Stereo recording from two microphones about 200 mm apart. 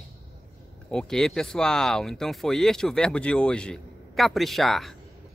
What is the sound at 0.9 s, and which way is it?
Speech, 5° left (ahead or behind).